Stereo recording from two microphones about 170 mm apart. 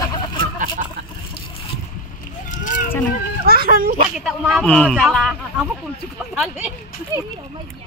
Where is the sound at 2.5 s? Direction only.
50° left (ahead or behind).